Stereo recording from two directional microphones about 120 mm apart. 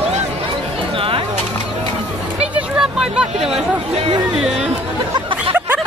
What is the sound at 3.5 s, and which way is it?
Speech, 60° right (ahead or behind).